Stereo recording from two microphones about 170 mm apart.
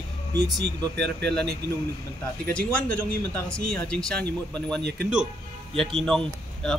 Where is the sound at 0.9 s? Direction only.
80° right.